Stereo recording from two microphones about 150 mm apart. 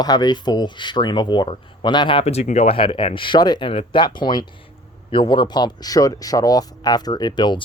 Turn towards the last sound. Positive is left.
turn(degrees=30)  # may be behind; listen again after turning